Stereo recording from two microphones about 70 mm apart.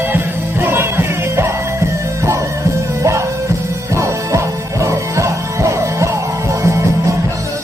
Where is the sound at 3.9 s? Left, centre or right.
Right.